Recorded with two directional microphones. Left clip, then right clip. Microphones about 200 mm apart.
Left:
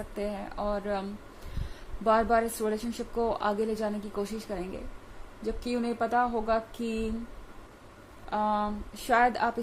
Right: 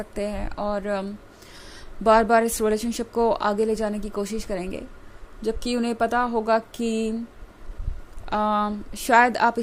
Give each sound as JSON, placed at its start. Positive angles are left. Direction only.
{"t": 0.1, "sound": "a woman's voice", "side_deg": -30}
{"t": 2.0, "sound": "a woman's voice", "side_deg": -40}
{"t": 8.3, "sound": "a woman's voice", "side_deg": -40}